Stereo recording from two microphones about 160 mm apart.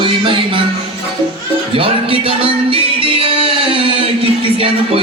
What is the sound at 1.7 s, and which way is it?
Music, 35° right (ahead or behind).